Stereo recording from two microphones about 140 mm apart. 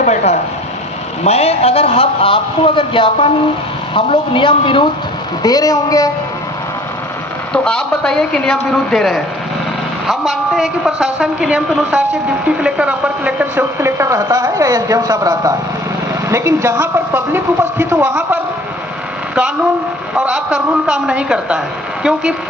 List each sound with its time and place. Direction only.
0.0 s a man's voice: 55° left (ahead or behind); by 4.8 s 35° left (ahead or behind)
5.4 s a woman's voice: 25° left (ahead or behind)
7.5 s a woman's voice: 5° left (ahead or behind); by 18.4 s 15° right (ahead or behind)
20.2 s a woman's voice: 5° right (ahead or behind)